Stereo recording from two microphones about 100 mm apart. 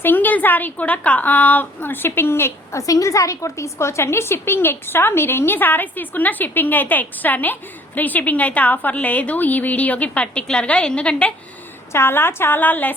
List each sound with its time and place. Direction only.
0.0 s a woman's voice: 20° left (ahead or behind)
11.9 s a woman's voice: 25° left (ahead or behind)